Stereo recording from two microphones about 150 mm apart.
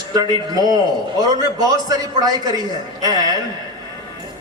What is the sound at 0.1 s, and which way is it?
Speech, 25° right (ahead or behind).